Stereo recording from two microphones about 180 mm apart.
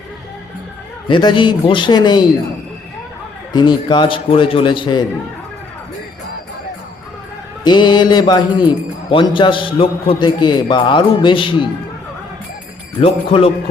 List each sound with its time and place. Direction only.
1.0 s a man's voice: 25° left (ahead or behind)
3.5 s a man's voice: 25° left (ahead or behind)
7.6 s a man's voice: 25° left (ahead or behind)
13.0 s a man's voice: 30° left (ahead or behind)